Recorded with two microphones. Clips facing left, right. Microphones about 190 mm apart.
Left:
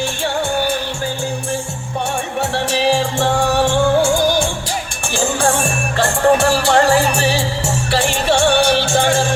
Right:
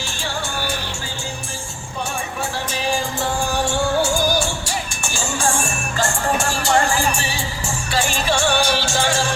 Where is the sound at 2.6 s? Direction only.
70° left (ahead or behind).